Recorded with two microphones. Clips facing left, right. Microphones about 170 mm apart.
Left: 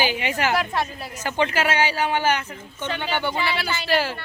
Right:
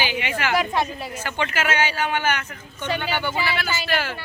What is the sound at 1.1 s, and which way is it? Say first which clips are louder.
A man's voice: left 3 dB; 40° left (ahead or behind).